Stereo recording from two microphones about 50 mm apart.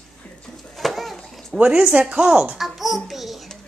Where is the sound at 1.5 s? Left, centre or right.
Right.